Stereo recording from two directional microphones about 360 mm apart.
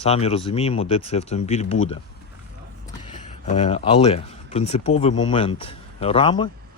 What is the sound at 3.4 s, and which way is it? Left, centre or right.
Speech, centre.